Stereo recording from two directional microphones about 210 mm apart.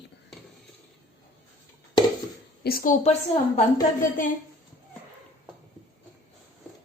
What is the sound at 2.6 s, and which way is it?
Speech, 40° left (ahead or behind).